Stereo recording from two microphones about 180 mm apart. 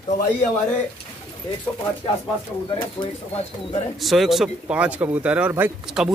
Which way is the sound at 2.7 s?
25° left (ahead or behind).